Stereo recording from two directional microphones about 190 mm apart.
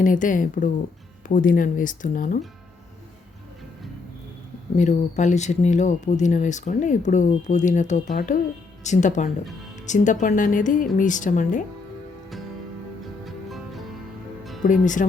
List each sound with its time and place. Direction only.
0.0 s a woman's voice: 45° left (ahead or behind)
4.8 s a woman's voice: 40° left (ahead or behind)
13.2 s music: centre (ahead or behind)
14.6 s speech: 40° left (ahead or behind)